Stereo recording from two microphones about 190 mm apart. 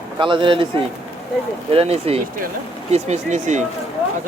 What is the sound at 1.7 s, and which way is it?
Speech, 30° right (ahead or behind).